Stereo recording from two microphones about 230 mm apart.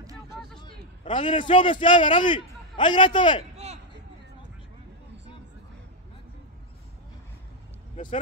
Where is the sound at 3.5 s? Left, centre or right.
Right.